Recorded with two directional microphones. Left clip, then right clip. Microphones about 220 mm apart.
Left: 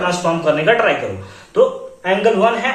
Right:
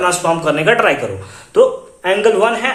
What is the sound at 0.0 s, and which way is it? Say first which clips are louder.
Speech: right 2 dB; 50° right (ahead or behind).